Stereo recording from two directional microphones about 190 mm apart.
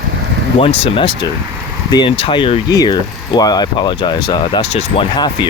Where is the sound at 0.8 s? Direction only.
25° left (ahead or behind).